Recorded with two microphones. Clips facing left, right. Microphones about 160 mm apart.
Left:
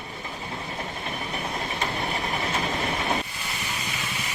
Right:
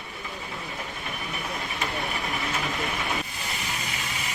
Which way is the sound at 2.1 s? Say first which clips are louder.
Left 2 dB; 30° left (ahead or behind).